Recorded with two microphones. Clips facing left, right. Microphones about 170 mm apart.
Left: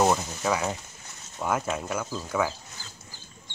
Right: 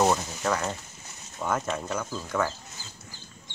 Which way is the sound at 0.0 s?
Centre (ahead or behind).